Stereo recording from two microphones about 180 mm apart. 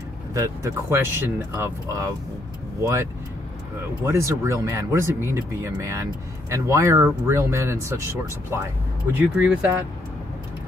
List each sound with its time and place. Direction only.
0.3 s speech: 15° right (ahead or behind)
4.0 s speech: 15° right (ahead or behind)